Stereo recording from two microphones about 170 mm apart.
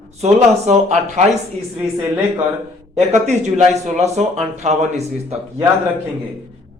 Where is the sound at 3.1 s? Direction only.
45° right (ahead or behind).